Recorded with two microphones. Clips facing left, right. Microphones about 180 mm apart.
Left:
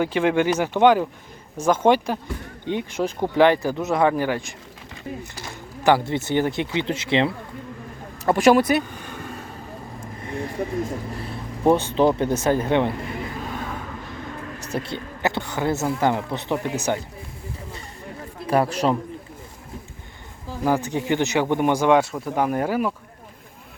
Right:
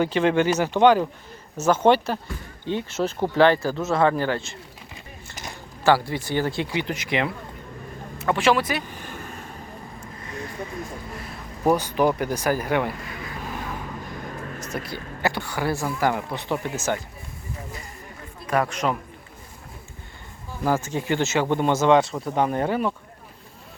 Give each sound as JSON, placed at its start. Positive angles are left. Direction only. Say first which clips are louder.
{"t": 0.0, "sound": "speech", "louder": "even", "side_deg": 10}
{"t": 5.3, "sound": "a sound", "louder": "left 1 dB", "side_deg": -15}
{"t": 5.8, "sound": "speech", "louder": "left 1 dB", "side_deg": 20}
{"t": 8.2, "sound": "speech", "louder": "left 5 dB", "side_deg": 40}
{"t": 8.9, "sound": "vehicle", "louder": "left 2 dB", "side_deg": -10}
{"t": 11.1, "sound": "speech", "louder": "left 5 dB", "side_deg": 30}
{"t": 14.6, "sound": "speech", "louder": "left 6 dB", "side_deg": 30}
{"t": 18.4, "sound": "a man's voice", "louder": "left 3 dB", "side_deg": 30}
{"t": 20.7, "sound": "speech", "louder": "left 2 dB", "side_deg": 15}